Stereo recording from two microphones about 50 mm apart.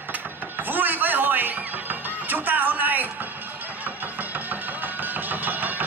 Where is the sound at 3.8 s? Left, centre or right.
Right.